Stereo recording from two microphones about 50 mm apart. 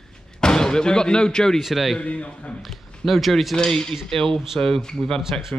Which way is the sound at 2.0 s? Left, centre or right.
Left.